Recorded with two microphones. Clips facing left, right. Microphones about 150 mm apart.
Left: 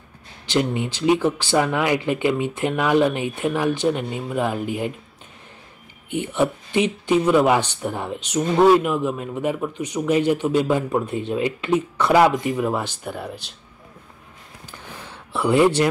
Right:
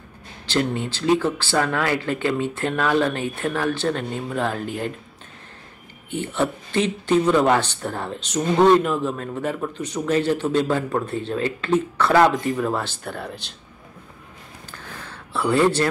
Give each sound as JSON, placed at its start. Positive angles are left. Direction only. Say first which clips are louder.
{"t": 0.5, "sound": "speech", "louder": "left 1 dB", "side_deg": 15}
{"t": 6.0, "sound": "speech", "louder": "left 2 dB", "side_deg": 15}
{"t": 14.7, "sound": "a sound", "louder": "even", "side_deg": 15}